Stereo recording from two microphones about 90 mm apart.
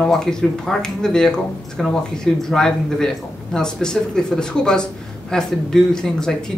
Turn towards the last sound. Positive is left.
turn(degrees=5)  # may be behind; listen again after turning